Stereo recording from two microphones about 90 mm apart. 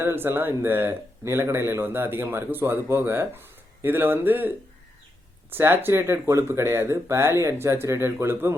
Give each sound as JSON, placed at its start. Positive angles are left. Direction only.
{"t": 0.0, "sound": "speech", "side_deg": -25}